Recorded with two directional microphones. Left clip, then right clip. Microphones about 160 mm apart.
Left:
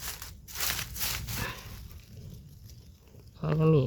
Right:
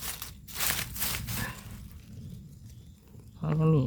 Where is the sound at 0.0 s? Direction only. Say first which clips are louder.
Right 1 dB; 10° right (ahead or behind).